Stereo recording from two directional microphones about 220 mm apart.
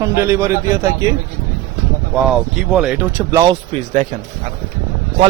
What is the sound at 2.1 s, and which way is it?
A man's voice, 5° right (ahead or behind).